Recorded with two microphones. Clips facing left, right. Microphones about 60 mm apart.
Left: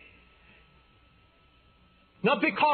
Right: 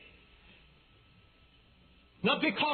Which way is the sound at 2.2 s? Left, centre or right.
Left.